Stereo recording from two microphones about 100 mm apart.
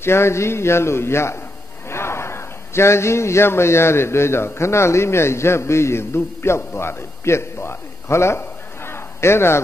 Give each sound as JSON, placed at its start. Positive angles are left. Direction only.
{"t": 0.0, "sound": "a man's voice", "side_deg": 25}